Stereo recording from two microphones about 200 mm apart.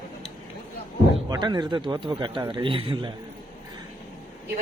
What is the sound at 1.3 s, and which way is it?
A man's voice, 20° right (ahead or behind).